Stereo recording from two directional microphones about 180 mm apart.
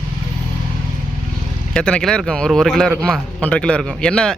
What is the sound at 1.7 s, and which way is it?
Speech, 5° left (ahead or behind).